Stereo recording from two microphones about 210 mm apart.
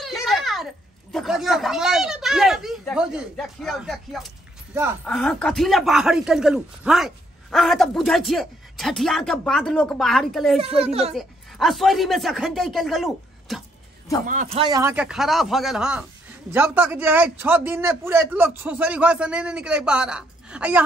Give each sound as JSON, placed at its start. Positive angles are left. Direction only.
{"t": 0.0, "sound": "a sound", "side_deg": 0}
{"t": 1.1, "sound": "a man's voice", "side_deg": 0}
{"t": 10.6, "sound": "a child's voice", "side_deg": -30}
{"t": 11.1, "sound": "a man's voice", "side_deg": 0}
{"t": 14.2, "sound": "speech", "side_deg": -35}
{"t": 14.6, "sound": "a man's voice", "side_deg": -15}